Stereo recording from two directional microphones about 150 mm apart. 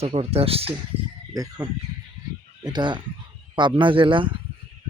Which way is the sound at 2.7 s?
30° right (ahead or behind).